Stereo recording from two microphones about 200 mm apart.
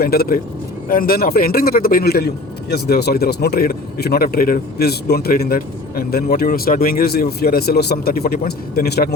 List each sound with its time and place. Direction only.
0.0 s a man's voice: 50° left (ahead or behind)